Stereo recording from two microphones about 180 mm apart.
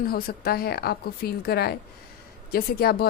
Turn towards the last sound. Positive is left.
turn(degrees=60)  # may be behind; listen again after turning